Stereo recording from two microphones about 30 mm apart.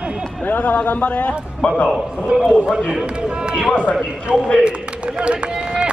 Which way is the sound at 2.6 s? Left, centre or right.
Right.